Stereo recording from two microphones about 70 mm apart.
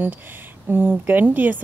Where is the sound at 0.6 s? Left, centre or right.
Right.